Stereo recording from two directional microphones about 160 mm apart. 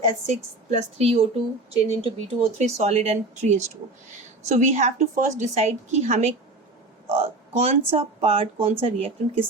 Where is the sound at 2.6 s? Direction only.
40° right (ahead or behind).